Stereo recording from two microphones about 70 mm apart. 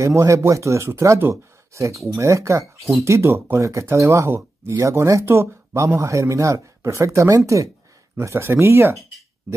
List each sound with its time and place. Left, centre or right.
0.0 s speech: right
5.2 s speech: right